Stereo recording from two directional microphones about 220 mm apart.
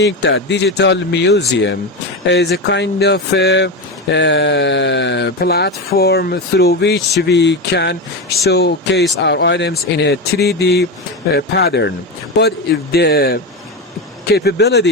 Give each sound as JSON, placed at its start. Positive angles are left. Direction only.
{"t": 0.0, "sound": "speech", "side_deg": 55}